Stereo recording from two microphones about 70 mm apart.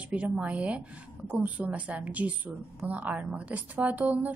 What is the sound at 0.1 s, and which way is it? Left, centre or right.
A woman's voice, centre.